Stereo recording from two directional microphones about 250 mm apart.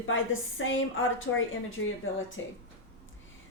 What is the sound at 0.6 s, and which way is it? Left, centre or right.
A woman's voice, left.